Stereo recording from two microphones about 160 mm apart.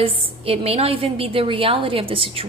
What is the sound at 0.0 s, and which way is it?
A woman's voice, 40° right (ahead or behind).